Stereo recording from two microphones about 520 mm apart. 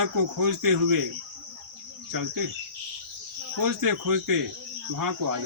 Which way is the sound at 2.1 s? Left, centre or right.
Right.